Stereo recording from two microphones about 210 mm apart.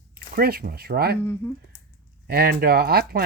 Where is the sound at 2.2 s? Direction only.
45° right (ahead or behind).